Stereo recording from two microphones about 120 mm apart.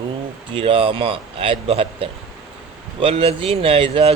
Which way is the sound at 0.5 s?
50° right (ahead or behind).